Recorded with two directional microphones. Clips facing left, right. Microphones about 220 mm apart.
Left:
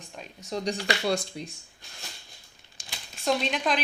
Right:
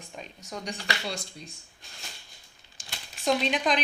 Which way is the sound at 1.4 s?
80° left.